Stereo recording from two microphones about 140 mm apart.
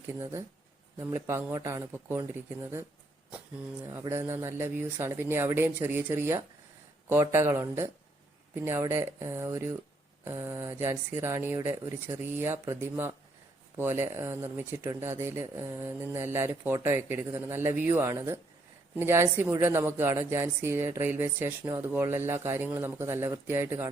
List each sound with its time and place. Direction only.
0.1 s speech: 20° right (ahead or behind)
3.8 s speech: 20° right (ahead or behind)